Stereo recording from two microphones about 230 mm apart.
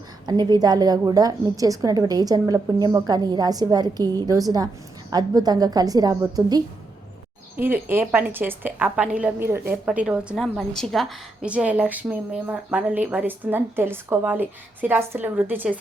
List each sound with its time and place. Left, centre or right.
0.3 s a woman's voice: centre
7.9 s a woman's voice: centre